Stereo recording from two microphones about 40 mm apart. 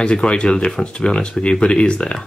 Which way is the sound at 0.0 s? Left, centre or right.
Left.